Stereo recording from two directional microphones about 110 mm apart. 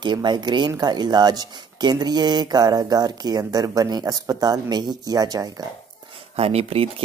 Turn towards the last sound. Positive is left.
turn(degrees=-65)  # may be behind; listen again after turning